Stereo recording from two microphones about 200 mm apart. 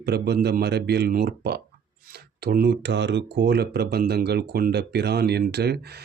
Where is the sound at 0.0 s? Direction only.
55° right (ahead or behind).